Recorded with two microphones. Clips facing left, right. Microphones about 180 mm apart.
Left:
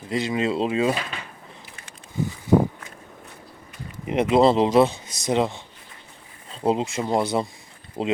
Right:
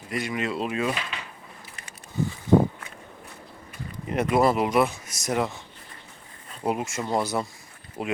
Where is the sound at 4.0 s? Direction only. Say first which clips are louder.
Left 4 dB; 20° left (ahead or behind).